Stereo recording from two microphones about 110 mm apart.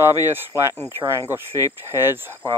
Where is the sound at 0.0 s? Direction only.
20° right (ahead or behind).